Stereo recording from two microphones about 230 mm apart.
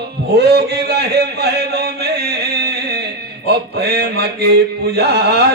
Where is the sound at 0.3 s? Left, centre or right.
Right.